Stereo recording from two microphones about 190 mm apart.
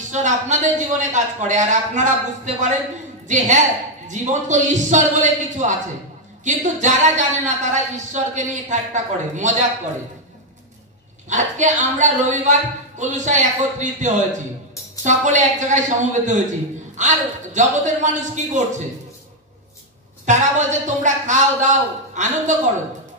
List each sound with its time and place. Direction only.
0.1 s a woman's voice: 40° right (ahead or behind)
11.2 s speech: 40° right (ahead or behind)
20.2 s speech: 40° right (ahead or behind)